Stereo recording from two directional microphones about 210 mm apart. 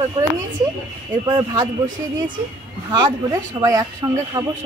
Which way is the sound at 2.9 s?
20° right (ahead or behind).